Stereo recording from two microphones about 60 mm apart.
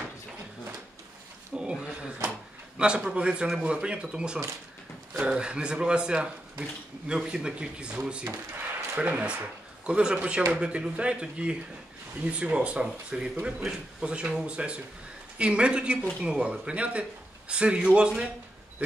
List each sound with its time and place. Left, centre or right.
1.5 s a sound: centre
2.8 s speech: centre
8.3 s speech: right